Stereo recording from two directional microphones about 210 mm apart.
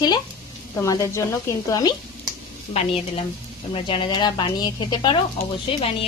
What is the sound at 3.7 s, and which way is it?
Speech, 25° left (ahead or behind).